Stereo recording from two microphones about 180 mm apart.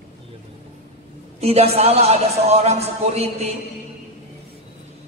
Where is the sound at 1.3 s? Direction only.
35° right (ahead or behind).